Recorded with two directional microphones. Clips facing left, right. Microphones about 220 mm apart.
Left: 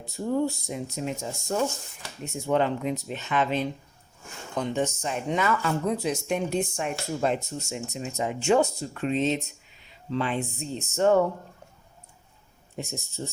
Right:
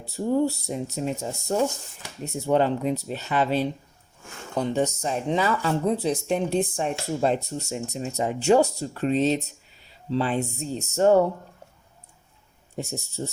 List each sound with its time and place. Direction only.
0.4 s speech: 40° right (ahead or behind)
12.7 s speech: 40° right (ahead or behind)